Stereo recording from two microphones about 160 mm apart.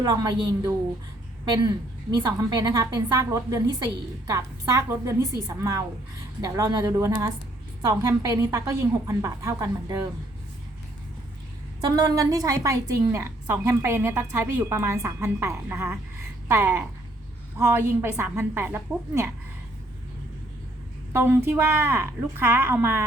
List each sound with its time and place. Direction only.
0.0 s a woman's voice: 25° right (ahead or behind)
11.9 s a woman's voice: 25° right (ahead or behind)
21.1 s a woman's voice: 15° right (ahead or behind)